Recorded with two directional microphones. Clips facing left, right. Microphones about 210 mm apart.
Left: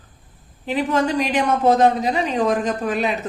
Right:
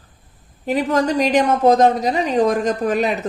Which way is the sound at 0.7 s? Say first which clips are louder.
Right 2 dB; 40° right (ahead or behind).